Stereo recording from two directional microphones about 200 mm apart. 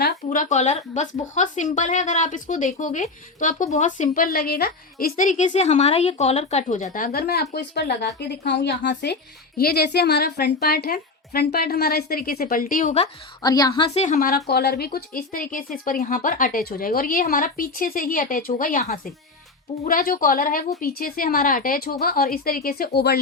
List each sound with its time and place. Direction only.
0.0 s a woman's voice: 45° left (ahead or behind)
13.4 s a woman's voice: 20° left (ahead or behind); by 23.2 s 55° left (ahead or behind)